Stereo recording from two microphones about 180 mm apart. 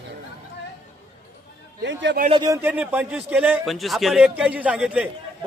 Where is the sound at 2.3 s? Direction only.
20° right (ahead or behind).